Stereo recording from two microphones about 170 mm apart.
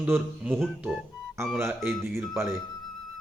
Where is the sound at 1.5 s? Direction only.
15° right (ahead or behind).